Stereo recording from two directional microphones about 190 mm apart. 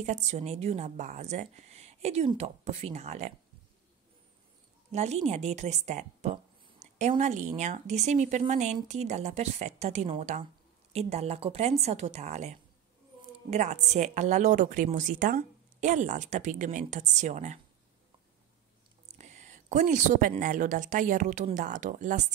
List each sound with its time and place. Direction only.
0.0 s speech: 35° right (ahead or behind)
4.9 s speech: 35° right (ahead or behind)
19.1 s speech: 40° right (ahead or behind)